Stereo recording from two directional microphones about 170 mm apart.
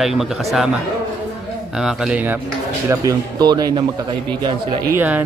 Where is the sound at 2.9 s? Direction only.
20° right (ahead or behind).